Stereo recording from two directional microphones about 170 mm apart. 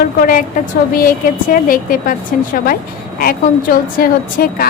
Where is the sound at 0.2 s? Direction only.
55° left (ahead or behind).